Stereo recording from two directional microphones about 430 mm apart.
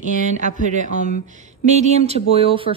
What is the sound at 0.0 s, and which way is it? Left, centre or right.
A woman's voice, centre.